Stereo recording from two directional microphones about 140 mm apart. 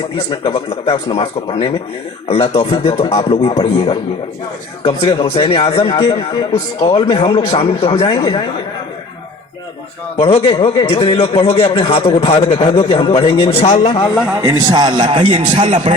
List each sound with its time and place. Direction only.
0.3 s a man's voice: 40° left (ahead or behind)
10.2 s a man's voice: 40° left (ahead or behind)
14.6 s speech: 30° right (ahead or behind)